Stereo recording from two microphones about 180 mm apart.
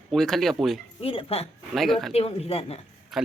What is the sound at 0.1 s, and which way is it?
Speech, centre (ahead or behind).